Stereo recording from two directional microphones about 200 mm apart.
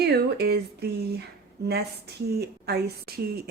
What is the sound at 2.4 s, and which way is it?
Speech, 55° right (ahead or behind).